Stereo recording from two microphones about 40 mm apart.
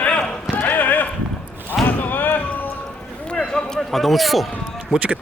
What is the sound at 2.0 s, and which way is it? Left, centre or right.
Slam, left.